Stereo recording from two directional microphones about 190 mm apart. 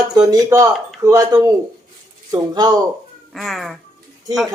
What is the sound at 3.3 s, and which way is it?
Speech, centre (ahead or behind).